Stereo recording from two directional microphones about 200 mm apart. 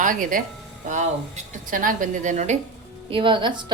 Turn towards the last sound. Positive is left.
turn(degrees=-20)  # may be behind; listen again after turning